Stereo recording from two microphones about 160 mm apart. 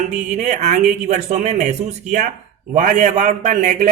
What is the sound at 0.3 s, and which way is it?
Speech, 50° right (ahead or behind).